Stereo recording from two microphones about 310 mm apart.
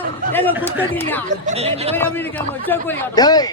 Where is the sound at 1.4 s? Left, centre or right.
Centre.